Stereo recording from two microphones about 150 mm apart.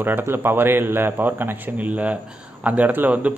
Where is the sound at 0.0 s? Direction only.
15° right (ahead or behind).